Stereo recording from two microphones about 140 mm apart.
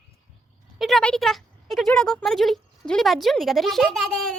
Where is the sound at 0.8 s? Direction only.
5° left (ahead or behind).